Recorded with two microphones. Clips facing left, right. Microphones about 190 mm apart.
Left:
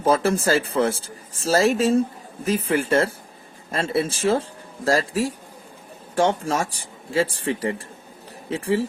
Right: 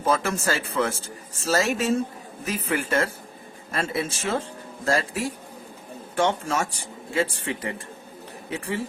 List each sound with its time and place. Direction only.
0.0 s speech: 35° left (ahead or behind)